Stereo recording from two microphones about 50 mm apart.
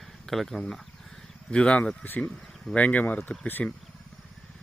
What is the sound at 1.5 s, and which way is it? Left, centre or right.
Speech, left.